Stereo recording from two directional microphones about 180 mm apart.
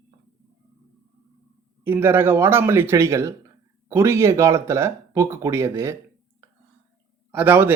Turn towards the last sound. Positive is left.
turn(degrees=-10)  # may be behind; listen again after turning